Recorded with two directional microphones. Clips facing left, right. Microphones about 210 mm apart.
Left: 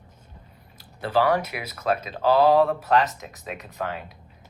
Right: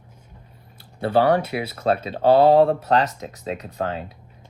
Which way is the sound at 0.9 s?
30° right (ahead or behind).